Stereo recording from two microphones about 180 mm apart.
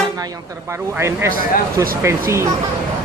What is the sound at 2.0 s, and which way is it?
Speech, 15° right (ahead or behind).